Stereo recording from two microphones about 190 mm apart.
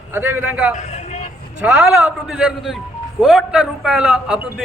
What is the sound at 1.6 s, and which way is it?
A man's voice, 5° right (ahead or behind).